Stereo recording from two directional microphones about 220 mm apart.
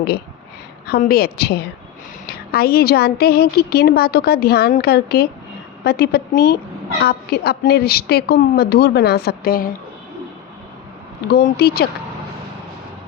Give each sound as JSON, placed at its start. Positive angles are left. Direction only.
{"t": 0.9, "sound": "a woman's voice", "side_deg": 45}
{"t": 11.3, "sound": "a woman's voice", "side_deg": 45}